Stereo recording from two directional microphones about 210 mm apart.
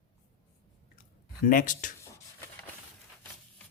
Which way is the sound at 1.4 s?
40° left (ahead or behind).